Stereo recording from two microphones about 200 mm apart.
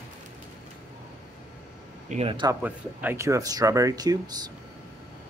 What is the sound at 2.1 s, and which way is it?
Speech, 30° right (ahead or behind).